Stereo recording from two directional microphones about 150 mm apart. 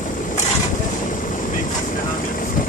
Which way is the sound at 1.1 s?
60° left (ahead or behind).